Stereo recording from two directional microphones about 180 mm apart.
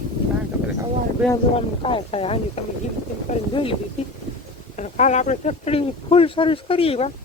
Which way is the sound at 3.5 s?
30° left (ahead or behind).